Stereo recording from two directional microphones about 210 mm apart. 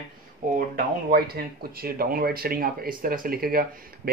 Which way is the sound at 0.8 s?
45° right (ahead or behind).